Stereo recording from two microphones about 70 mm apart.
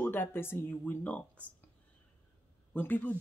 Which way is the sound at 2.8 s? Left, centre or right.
Left.